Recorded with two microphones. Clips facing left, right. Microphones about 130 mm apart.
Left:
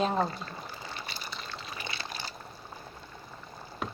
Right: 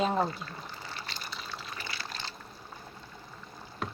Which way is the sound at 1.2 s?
5° right (ahead or behind).